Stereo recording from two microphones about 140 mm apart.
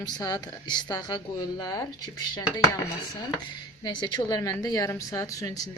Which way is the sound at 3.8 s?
35° left (ahead or behind).